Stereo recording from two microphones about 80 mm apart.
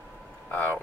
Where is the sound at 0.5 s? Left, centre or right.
Left.